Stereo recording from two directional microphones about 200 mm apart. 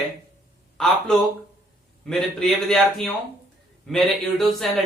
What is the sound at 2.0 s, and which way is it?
Speech, centre (ahead or behind).